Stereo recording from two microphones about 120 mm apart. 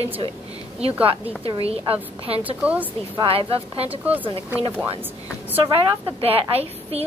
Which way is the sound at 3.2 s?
50° right (ahead or behind).